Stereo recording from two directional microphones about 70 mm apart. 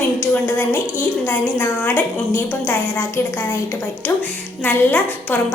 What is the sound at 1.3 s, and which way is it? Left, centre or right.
Speech, left.